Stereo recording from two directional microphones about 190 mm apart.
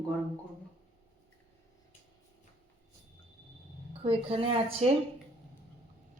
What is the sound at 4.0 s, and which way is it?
Speech, 30° right (ahead or behind).